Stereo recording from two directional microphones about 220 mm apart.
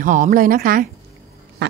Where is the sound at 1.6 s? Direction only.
50° right (ahead or behind).